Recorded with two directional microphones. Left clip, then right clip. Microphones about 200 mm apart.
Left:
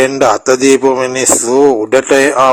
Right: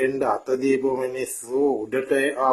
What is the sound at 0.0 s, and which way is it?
Speech, 40° left (ahead or behind).